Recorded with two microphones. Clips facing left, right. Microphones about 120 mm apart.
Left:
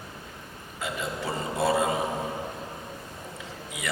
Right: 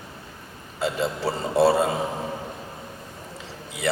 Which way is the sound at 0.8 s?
30° right (ahead or behind).